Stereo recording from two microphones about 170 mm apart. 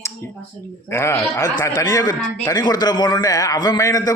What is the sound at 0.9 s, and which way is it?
A man's voice, 15° left (ahead or behind).